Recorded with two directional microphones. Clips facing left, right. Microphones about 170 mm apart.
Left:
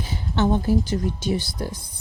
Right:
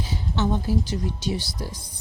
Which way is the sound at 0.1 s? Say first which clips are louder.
Left 4 dB; 55° left (ahead or behind).